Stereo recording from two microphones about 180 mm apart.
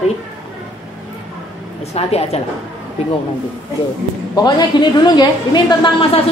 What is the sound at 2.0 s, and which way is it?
Speech, 35° left (ahead or behind).